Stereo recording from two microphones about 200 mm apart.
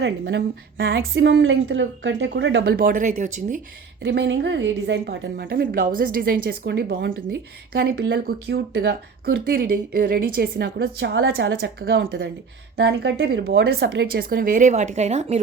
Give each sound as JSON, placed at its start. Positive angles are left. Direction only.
{"t": 0.0, "sound": "a woman's voice", "side_deg": -65}
{"t": 2.7, "sound": "speech", "side_deg": -45}
{"t": 4.0, "sound": "a woman's voice", "side_deg": -65}